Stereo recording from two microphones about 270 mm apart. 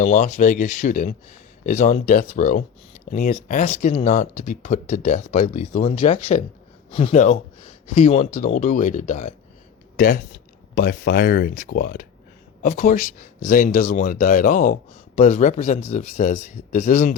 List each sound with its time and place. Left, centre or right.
0.0 s speech: left
10.8 s speech: left